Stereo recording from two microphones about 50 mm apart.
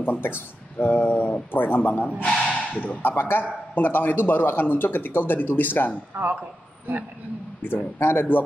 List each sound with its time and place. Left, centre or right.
0.0 s speech: left
2.2 s speech: left
3.0 s speech: left
6.9 s a man's voice: right
7.6 s speech: left